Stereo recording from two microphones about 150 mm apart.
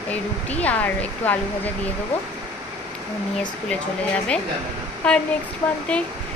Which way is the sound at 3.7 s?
10° left (ahead or behind).